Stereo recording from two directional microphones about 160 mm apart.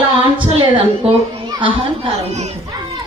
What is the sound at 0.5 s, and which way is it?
A woman's voice, 30° right (ahead or behind).